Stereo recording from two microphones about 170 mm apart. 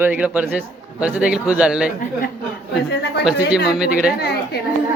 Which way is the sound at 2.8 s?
75° left (ahead or behind).